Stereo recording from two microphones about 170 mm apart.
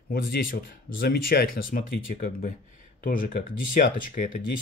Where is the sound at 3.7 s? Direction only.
50° left (ahead or behind).